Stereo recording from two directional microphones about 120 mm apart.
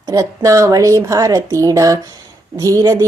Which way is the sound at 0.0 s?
30° right (ahead or behind).